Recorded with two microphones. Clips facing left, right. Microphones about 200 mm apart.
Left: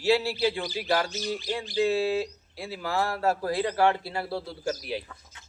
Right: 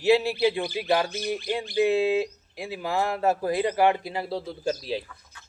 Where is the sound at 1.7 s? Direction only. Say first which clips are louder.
Right 3 dB; 20° right (ahead or behind).